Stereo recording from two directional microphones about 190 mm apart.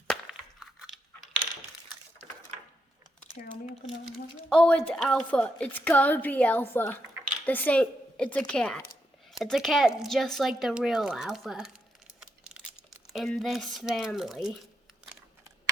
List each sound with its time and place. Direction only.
0.1 s a sound: centre (ahead or behind)
3.4 s speech: 40° left (ahead or behind)
4.4 s a woman's voice: 5° left (ahead or behind)
12.2 s crumpling: 5° right (ahead or behind)